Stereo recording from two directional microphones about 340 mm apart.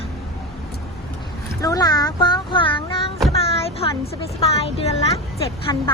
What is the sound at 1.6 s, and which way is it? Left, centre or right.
Child singing, centre.